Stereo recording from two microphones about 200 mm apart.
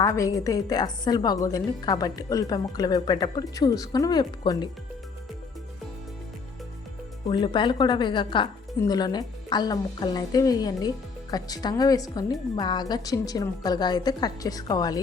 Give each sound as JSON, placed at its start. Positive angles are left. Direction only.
{"t": 0.0, "sound": "speech", "side_deg": 15}
{"t": 7.3, "sound": "speech", "side_deg": 25}